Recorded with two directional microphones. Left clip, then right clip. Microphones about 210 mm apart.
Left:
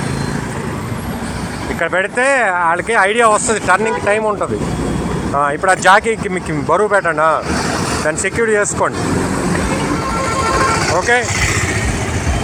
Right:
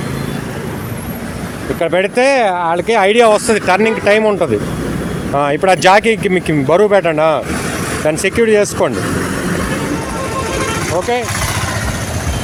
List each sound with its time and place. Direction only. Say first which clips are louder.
1.8 s speech: right 3 dB; 65° right (ahead or behind)